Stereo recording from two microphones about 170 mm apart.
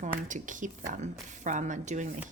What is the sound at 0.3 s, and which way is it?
Speech, 50° right (ahead or behind).